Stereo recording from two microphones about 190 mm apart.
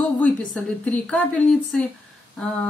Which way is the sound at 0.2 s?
5° left (ahead or behind).